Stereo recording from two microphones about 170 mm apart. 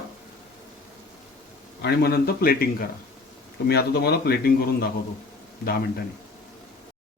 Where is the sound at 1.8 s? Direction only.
65° left (ahead or behind).